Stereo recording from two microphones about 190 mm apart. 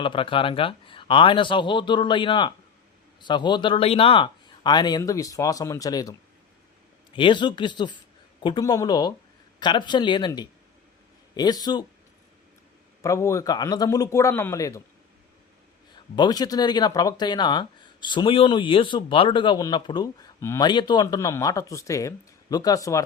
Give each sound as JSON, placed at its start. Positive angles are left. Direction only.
{"t": 0.0, "sound": "speech", "side_deg": 25}
{"t": 13.0, "sound": "a man's voice", "side_deg": 15}
{"t": 16.1, "sound": "speech", "side_deg": 20}